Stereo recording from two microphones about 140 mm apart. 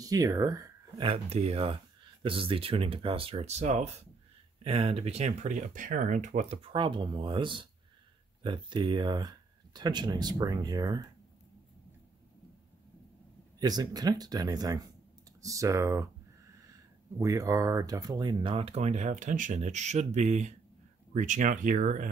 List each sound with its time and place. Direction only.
0.0 s speech: 25° right (ahead or behind); by 3.9 s 55° right (ahead or behind)
4.6 s speech: 45° right (ahead or behind); by 11.1 s 25° right (ahead or behind)
13.6 s speech: 30° right (ahead or behind)
17.2 s speech: 25° right (ahead or behind); by 22.1 s 65° right (ahead or behind)